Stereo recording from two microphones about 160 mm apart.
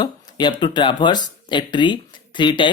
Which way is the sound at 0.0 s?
30° left (ahead or behind).